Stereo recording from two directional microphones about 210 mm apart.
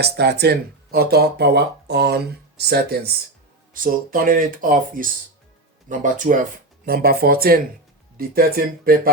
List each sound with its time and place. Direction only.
0.0 s speech: 50° right (ahead or behind)